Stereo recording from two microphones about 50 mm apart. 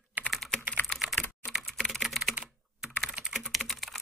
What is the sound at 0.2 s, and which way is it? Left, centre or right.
Typing, right.